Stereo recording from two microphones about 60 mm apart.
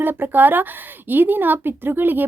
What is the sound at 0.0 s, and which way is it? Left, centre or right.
Speech, right.